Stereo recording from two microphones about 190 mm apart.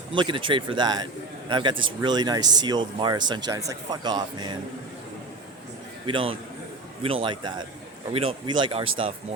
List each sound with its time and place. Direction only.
0.1 s a man's voice: 25° right (ahead or behind)
6.1 s speech: 25° right (ahead or behind)